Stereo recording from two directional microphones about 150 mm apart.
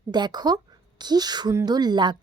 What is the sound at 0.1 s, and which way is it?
A woman's voice, 30° right (ahead or behind).